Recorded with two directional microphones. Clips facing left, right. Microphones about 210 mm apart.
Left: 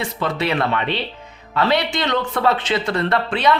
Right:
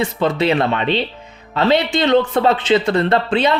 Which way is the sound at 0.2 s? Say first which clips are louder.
Right 4 dB; 25° right (ahead or behind).